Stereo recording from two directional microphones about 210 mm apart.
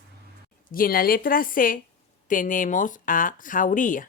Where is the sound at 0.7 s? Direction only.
45° left (ahead or behind).